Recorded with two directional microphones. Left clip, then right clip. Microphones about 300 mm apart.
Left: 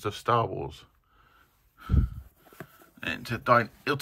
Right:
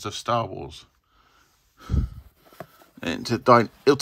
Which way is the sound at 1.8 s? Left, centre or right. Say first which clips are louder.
Even; centre.